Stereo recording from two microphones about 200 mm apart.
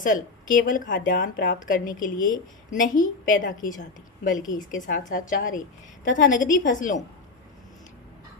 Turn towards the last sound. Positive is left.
turn(degrees=40)  # may be behind; listen again after turning